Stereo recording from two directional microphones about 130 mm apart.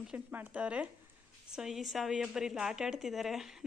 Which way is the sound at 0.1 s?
10° right (ahead or behind).